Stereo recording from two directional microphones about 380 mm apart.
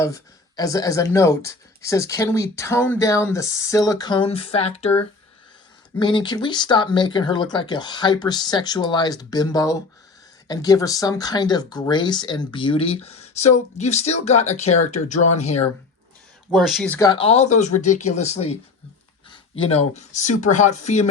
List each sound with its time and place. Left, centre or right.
0.0 s speech: centre
6.0 s speech: centre
16.5 s speech: centre